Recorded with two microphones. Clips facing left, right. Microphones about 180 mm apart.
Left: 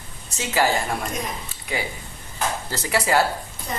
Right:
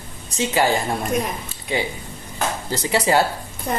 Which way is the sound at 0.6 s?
20° right (ahead or behind).